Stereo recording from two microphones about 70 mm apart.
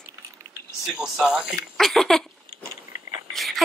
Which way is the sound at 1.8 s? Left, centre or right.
Centre.